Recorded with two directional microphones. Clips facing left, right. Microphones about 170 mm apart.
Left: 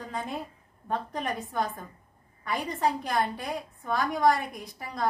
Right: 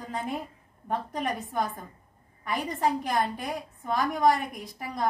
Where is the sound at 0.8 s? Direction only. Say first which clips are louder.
Right 1 dB; 20° right (ahead or behind).